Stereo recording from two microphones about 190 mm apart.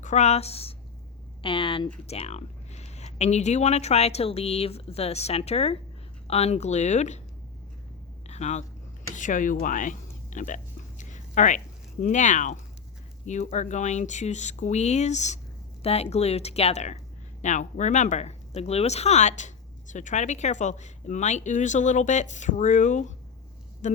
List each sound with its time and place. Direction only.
0.0 s a woman's voice: 40° left (ahead or behind)
8.3 s speech: 35° left (ahead or behind)